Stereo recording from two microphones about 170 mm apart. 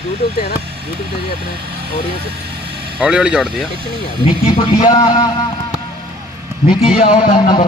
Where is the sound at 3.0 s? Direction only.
5° right (ahead or behind).